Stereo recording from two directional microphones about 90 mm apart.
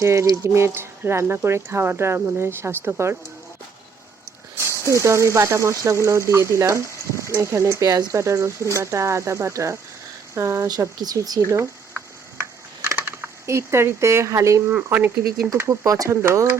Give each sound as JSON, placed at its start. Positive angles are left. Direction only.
{"t": 0.0, "sound": "speech", "side_deg": -30}
{"t": 5.0, "sound": "speech", "side_deg": -30}
{"t": 10.7, "sound": "speech", "side_deg": -45}
{"t": 11.9, "sound": "mechanisms", "side_deg": -20}
{"t": 13.0, "sound": "speech", "side_deg": -25}
{"t": 14.8, "sound": "speech", "side_deg": -20}
{"t": 15.5, "sound": "speech", "side_deg": -30}